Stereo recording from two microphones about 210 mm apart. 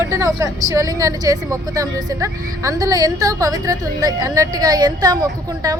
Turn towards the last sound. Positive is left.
turn(degrees=-15)  # may be behind; listen again after turning